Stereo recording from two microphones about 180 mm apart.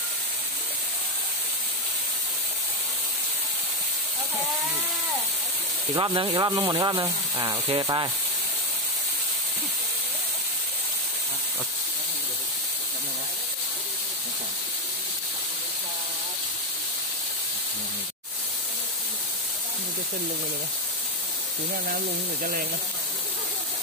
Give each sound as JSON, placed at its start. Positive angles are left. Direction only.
{"t": 5.9, "sound": "speech", "side_deg": -20}
{"t": 22.4, "sound": "speech", "side_deg": -50}